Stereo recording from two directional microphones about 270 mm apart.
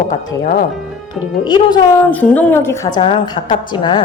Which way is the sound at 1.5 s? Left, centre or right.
Centre.